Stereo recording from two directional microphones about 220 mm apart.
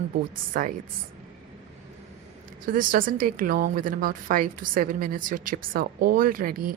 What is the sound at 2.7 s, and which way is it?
A woman's voice, 40° right (ahead or behind).